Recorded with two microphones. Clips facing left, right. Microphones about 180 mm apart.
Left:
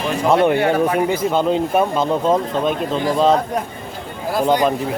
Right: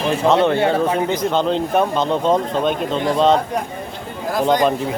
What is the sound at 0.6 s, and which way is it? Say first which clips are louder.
Speech: even; 25° right (ahead or behind).